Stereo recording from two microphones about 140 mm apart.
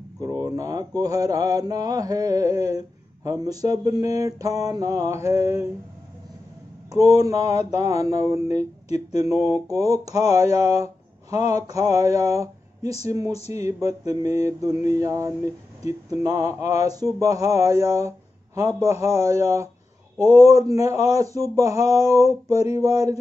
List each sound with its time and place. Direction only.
0.2 s mantra: 25° right (ahead or behind)
6.9 s mantra: 25° right (ahead or behind)